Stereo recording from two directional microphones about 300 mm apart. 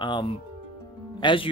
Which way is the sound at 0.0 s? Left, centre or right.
Centre.